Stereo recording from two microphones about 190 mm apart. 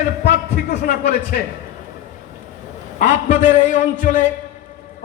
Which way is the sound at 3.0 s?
40° left (ahead or behind).